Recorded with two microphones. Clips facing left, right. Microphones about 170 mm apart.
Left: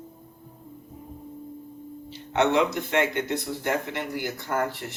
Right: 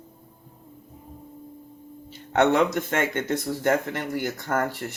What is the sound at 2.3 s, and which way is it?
Speech, 45° right (ahead or behind).